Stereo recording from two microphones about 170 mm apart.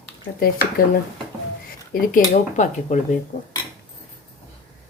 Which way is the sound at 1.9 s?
50° left (ahead or behind).